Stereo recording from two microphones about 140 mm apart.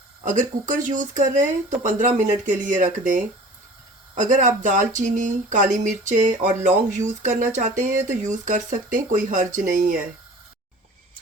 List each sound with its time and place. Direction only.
0.2 s speech: 65° right (ahead or behind)